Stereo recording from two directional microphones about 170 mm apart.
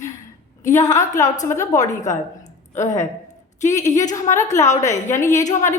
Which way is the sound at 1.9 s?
45° left (ahead or behind).